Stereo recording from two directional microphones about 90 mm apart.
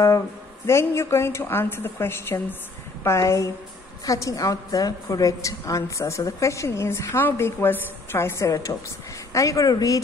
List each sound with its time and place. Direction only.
0.7 s a woman's voice: 30° left (ahead or behind)